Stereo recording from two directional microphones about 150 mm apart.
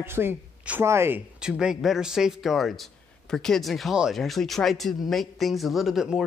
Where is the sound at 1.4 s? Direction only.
5° right (ahead or behind).